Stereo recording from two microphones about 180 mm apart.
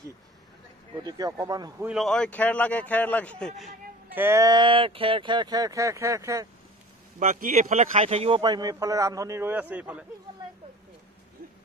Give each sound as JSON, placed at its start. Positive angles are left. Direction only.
{"t": 1.0, "sound": "a man's voice", "side_deg": -20}
{"t": 1.9, "sound": "a man's voice", "side_deg": 0}
{"t": 4.1, "sound": "a man's voice", "side_deg": -15}
{"t": 7.2, "sound": "a man's voice", "side_deg": -50}